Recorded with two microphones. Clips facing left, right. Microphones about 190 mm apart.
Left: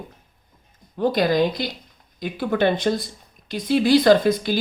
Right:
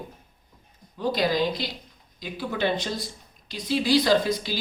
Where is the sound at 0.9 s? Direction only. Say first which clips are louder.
Left 5 dB; 55° left (ahead or behind).